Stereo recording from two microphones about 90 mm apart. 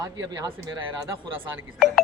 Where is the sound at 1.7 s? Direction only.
Centre (ahead or behind).